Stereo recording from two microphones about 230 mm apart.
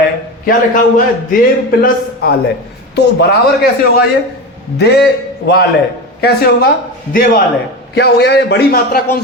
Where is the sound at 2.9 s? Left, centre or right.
Left.